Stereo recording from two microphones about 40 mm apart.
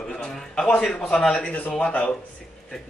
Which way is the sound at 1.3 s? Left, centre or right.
Left.